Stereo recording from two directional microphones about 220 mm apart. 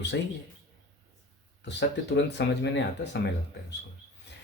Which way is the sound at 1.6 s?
50° left (ahead or behind).